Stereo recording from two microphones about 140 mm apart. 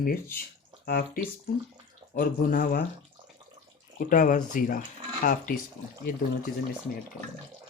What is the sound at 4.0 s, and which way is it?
Speech, 75° left (ahead or behind).